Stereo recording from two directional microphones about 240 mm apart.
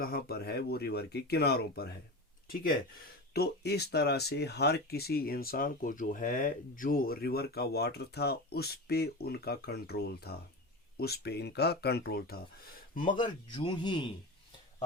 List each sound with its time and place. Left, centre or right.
0.0 s speech: left
3.3 s speech: left
13.1 s a man's voice: centre